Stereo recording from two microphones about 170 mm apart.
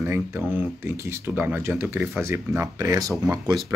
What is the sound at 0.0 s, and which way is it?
Speech, 15° right (ahead or behind).